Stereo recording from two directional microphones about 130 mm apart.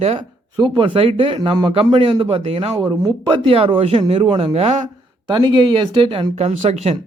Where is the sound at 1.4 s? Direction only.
30° right (ahead or behind).